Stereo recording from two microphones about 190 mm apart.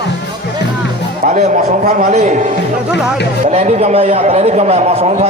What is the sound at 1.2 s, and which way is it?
A man's voice, 40° right (ahead or behind).